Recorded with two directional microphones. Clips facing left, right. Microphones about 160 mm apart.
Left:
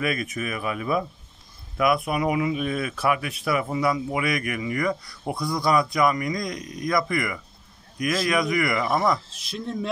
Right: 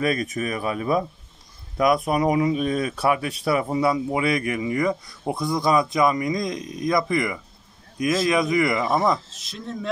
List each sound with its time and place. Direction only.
0.0 s speech: 35° right (ahead or behind)
2.0 s speech: 35° right (ahead or behind); by 9.6 s 20° right (ahead or behind)